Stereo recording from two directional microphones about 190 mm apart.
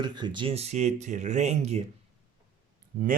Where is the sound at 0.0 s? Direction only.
25° right (ahead or behind).